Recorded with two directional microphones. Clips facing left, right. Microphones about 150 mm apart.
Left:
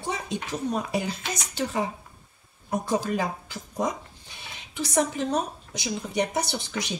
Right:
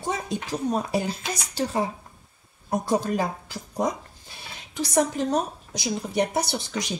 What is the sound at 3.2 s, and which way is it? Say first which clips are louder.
Speech: right 2 dB; 35° right (ahead or behind).